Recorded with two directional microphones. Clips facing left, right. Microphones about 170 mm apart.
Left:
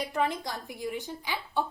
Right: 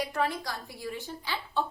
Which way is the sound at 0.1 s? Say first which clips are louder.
Left 1 dB; 20° left (ahead or behind).